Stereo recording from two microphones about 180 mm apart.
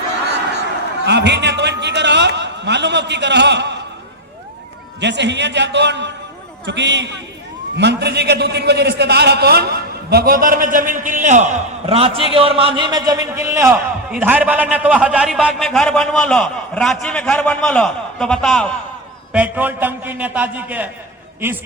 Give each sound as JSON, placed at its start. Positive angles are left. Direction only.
{"t": 1.0, "sound": "a man's voice", "side_deg": -70}
{"t": 4.9, "sound": "a man's voice", "side_deg": -75}
{"t": 11.9, "sound": "a man's voice", "side_deg": -30}
{"t": 19.3, "sound": "a man's voice", "side_deg": -10}